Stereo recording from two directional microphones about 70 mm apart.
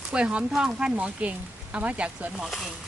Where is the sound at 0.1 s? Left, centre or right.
Centre.